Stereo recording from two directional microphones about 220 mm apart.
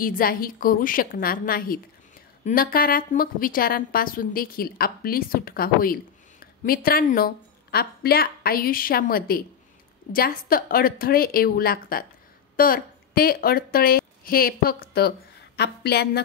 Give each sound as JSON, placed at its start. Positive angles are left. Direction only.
{"t": 0.0, "sound": "a woman's voice", "side_deg": 40}